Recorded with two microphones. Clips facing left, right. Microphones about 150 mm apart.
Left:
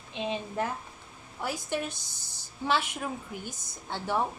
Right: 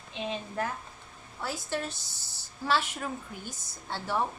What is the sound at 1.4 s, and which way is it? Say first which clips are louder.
A woman's voice: left 2 dB; 15° left (ahead or behind).